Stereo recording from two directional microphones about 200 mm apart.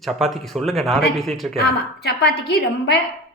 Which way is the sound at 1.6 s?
55° left (ahead or behind).